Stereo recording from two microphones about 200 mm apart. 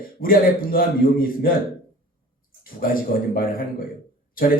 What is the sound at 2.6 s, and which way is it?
A man's voice, 45° left (ahead or behind).